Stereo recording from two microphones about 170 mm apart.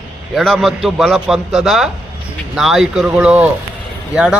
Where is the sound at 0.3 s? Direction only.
Centre (ahead or behind).